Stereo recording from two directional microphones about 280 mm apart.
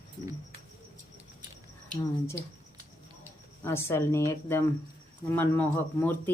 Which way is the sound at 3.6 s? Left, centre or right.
Centre.